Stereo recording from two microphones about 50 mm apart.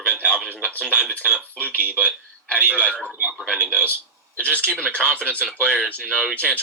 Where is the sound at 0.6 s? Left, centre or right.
Left.